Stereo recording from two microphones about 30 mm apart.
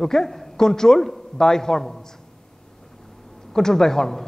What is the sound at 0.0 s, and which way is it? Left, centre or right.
A man's voice, centre.